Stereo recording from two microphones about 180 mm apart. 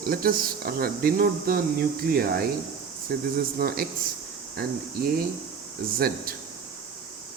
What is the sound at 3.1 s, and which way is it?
Speech, 60° right (ahead or behind).